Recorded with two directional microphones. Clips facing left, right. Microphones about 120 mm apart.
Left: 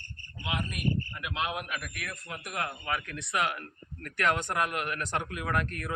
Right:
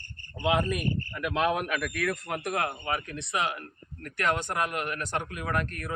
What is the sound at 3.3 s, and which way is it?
Speech, 15° right (ahead or behind).